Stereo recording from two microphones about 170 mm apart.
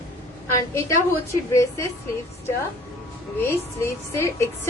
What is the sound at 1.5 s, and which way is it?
Speech, 15° left (ahead or behind).